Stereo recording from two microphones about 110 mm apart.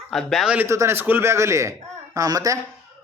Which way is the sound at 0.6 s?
25° right (ahead or behind).